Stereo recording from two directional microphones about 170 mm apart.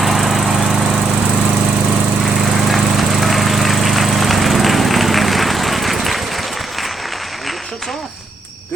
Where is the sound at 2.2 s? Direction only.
Centre (ahead or behind).